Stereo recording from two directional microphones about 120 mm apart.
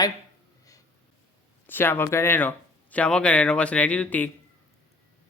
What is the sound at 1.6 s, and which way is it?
Speech, 15° left (ahead or behind).